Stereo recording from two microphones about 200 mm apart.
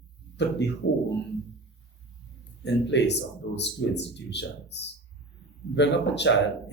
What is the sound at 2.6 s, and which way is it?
Speech, 60° left (ahead or behind).